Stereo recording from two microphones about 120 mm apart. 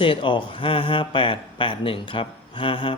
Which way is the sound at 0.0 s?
45° left (ahead or behind).